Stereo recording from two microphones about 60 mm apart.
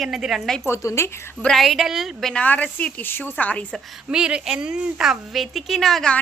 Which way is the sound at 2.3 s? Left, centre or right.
Left.